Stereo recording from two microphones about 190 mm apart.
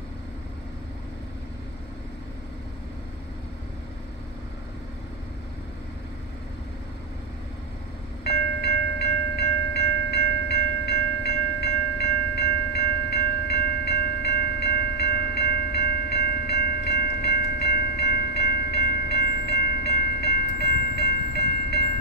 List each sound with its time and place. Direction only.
8.3 s train: 60° left (ahead or behind)